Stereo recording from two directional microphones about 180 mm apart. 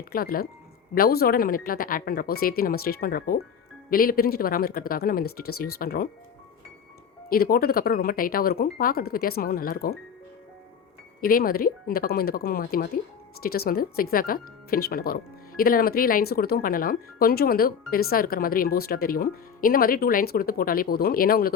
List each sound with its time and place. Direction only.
0.1 s speech: 55° left (ahead or behind)
7.3 s speech: 55° left (ahead or behind)
11.2 s speech: 55° left (ahead or behind)